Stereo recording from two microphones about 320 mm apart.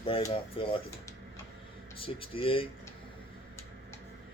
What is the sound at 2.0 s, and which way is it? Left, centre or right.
Speech, centre.